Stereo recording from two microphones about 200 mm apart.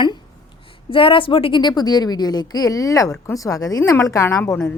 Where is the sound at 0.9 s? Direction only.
25° left (ahead or behind).